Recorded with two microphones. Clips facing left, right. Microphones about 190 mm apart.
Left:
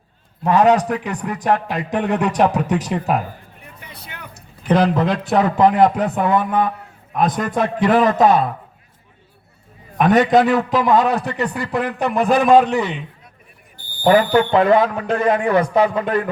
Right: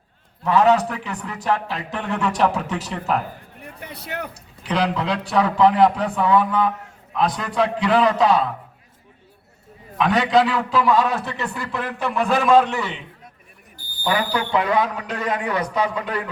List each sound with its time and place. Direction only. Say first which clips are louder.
0.5 s a man's voice: left 2 dB; 15° left (ahead or behind)
3.6 s a sound: right 4 dB; 65° right (ahead or behind)
4.7 s speech: left 6 dB; 50° left (ahead or behind)
10.1 s speech: left 5 dB; 45° left (ahead or behind)
10.7 s a man's voice: left 3 dB; 20° left (ahead or behind)
14.0 s speech: left 9 dB; 50° left (ahead or behind)